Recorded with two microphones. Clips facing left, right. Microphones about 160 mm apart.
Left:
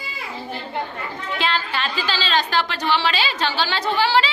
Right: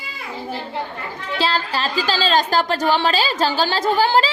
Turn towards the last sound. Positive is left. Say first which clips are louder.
# right 3 dB
turn(degrees=-45)  # may be behind; listen again after turning